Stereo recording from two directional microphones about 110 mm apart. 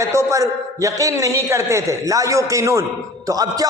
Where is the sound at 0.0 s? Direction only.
25° right (ahead or behind).